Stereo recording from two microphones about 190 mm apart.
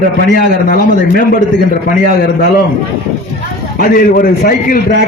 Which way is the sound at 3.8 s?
50° left (ahead or behind).